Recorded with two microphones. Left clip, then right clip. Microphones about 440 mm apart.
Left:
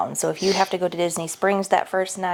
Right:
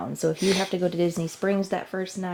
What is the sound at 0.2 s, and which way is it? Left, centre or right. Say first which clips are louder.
Speech: left 2 dB; left.